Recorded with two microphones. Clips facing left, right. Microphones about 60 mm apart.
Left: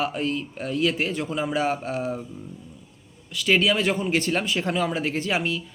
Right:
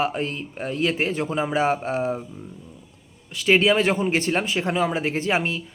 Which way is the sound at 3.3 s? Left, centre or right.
Right.